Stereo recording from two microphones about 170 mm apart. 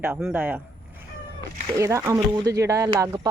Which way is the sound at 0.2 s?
5° right (ahead or behind).